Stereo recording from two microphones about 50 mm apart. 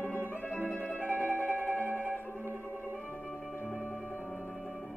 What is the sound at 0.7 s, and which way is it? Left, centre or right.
Music, left.